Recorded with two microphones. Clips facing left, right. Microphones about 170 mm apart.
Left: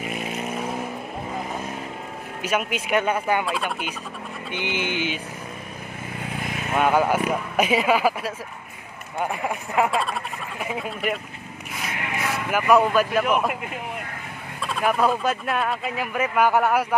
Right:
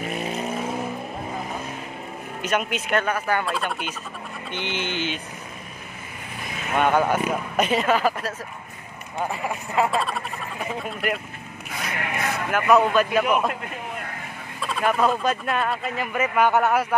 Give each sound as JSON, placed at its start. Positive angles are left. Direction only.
{"t": 2.4, "sound": "speech", "side_deg": 10}
{"t": 3.4, "sound": "speech", "side_deg": 0}
{"t": 6.7, "sound": "speech", "side_deg": 5}
{"t": 9.8, "sound": "speech", "side_deg": 0}
{"t": 12.4, "sound": "speech", "side_deg": 5}
{"t": 14.6, "sound": "speech", "side_deg": 0}